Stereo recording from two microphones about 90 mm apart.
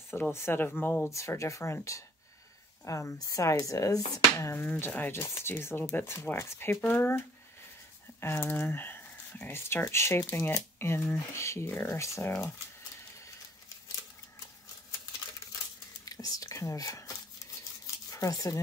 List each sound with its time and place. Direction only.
0.3 s speech: 25° left (ahead or behind)
1.1 s speech: 35° left (ahead or behind)
4.6 s speech: 25° left (ahead or behind)
16.1 s whispering: 40° left (ahead or behind)
18.1 s speech: 40° left (ahead or behind)